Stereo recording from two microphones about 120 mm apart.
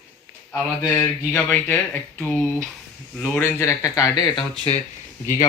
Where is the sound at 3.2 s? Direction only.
15° left (ahead or behind); by 4.4 s 35° left (ahead or behind).